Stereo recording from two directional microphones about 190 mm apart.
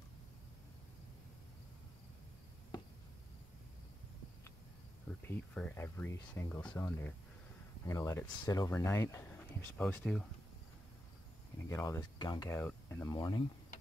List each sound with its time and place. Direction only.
5.2 s speech: 10° left (ahead or behind)
11.7 s speech: 15° left (ahead or behind)
13.1 s speech: 20° left (ahead or behind)